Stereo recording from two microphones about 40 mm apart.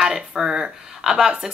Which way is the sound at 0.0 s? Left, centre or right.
Centre.